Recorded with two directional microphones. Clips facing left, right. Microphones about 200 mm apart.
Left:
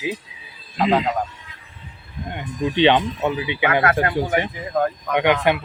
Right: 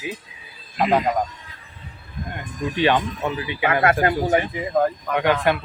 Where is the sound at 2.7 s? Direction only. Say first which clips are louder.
Left 3 dB; 25° left (ahead or behind).